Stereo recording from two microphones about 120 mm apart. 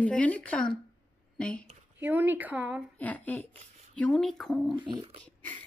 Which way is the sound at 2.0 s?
15° right (ahead or behind).